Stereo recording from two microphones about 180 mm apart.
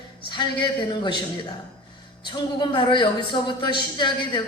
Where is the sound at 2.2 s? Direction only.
25° left (ahead or behind).